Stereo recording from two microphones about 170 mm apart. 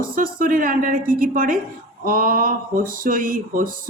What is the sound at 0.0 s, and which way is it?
Speech, 55° right (ahead or behind).